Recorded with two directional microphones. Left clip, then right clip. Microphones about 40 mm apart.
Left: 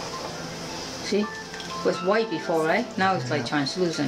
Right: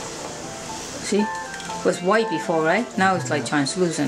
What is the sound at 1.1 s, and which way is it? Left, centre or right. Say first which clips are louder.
Speech: right 5 dB; right.